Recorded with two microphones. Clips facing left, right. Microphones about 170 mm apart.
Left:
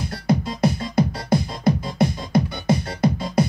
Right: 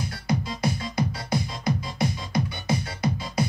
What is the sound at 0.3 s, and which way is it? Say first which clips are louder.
Music: left 7 dB; 55° left (ahead or behind).